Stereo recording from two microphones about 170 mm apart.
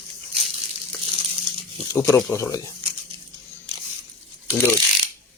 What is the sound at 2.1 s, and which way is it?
Speech, 20° left (ahead or behind).